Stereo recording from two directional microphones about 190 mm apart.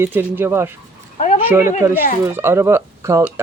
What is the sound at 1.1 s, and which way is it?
Speech, 35° left (ahead or behind).